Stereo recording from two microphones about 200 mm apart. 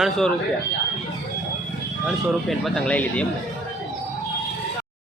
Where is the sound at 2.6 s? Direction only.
5° left (ahead or behind).